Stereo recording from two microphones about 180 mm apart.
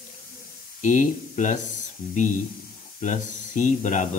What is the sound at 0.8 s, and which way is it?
Speech, 45° left (ahead or behind).